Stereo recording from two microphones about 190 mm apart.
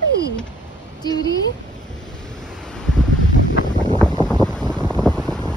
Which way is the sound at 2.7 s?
5° left (ahead or behind).